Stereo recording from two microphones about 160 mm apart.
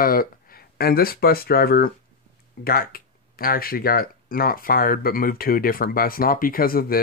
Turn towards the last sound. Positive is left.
turn(degrees=65)  # may be behind; listen again after turning